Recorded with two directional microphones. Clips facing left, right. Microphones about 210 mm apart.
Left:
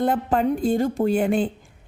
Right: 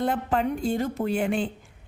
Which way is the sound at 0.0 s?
40° left (ahead or behind).